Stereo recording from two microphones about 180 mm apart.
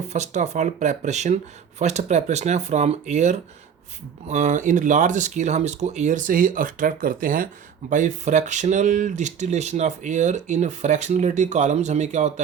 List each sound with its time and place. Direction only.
0.1 s speech: 40° right (ahead or behind)